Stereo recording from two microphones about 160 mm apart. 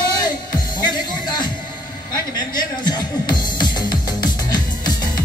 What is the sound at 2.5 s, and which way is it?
Music, 25° left (ahead or behind).